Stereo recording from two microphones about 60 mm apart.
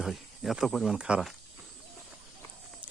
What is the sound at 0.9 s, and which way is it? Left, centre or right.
Speech, centre.